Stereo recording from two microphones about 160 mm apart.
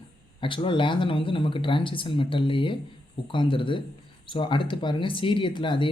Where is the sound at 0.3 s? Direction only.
30° left (ahead or behind).